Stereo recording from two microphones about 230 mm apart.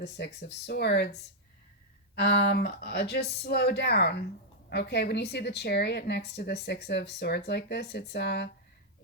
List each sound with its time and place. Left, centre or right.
0.0 s speech: left
2.1 s speech: left